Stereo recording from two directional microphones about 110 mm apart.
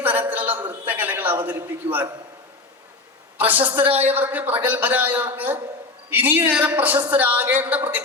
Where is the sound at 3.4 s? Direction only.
15° right (ahead or behind).